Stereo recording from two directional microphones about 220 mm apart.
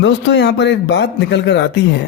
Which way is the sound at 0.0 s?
55° left (ahead or behind).